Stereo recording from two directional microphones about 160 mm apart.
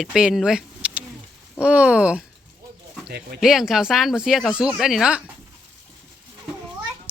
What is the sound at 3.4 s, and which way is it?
Speech, centre (ahead or behind).